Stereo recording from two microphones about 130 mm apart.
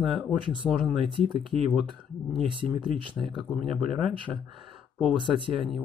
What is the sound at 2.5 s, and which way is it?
Speech, 40° right (ahead or behind).